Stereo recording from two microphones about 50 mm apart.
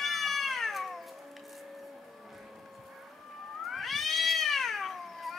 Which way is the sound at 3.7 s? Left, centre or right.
Centre.